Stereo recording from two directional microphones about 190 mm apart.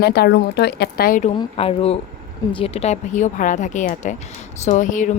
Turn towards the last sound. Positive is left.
turn(degrees=40)  # may be behind; listen again after turning